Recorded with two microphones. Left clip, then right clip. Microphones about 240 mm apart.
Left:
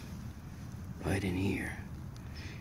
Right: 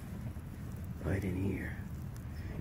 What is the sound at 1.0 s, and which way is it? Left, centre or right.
Speech, left.